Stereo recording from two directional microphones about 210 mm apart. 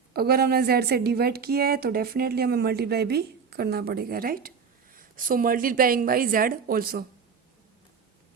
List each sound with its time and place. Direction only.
0.1 s a woman's voice: 45° right (ahead or behind)